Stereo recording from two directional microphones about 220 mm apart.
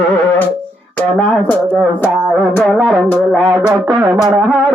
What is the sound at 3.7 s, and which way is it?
Music, 20° right (ahead or behind).